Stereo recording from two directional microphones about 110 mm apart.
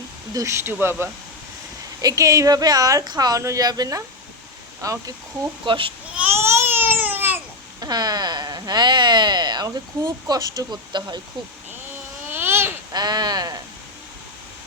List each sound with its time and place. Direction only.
0.3 s speech: 25° right (ahead or behind)
2.0 s speech: 35° right (ahead or behind)
5.6 s a child's voice: 50° right (ahead or behind)
6.3 s babbling: 25° right (ahead or behind)
7.8 s speech: 35° right (ahead or behind)
12.3 s a sound: 20° right (ahead or behind)
12.9 s speech: 40° right (ahead or behind)